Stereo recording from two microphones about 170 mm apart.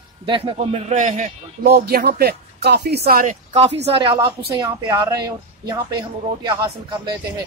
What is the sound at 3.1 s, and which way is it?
Speech, 55° right (ahead or behind).